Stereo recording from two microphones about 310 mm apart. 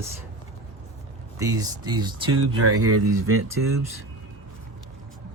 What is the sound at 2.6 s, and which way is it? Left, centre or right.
Speech, right.